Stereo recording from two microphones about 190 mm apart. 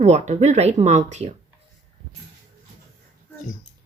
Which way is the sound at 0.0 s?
35° right (ahead or behind).